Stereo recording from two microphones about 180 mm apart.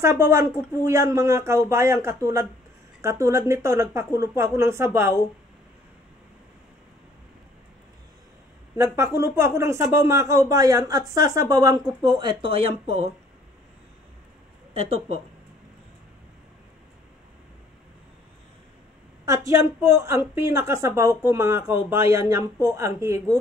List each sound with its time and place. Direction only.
0.0 s a woman's voice: 15° right (ahead or behind)
8.7 s speech: 15° right (ahead or behind); by 13.1 s 35° right (ahead or behind)
14.8 s speech: 35° right (ahead or behind)
19.2 s a woman's voice: 20° right (ahead or behind)